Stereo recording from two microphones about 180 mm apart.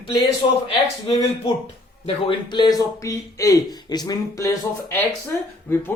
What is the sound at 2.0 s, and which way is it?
Speech, 25° left (ahead or behind).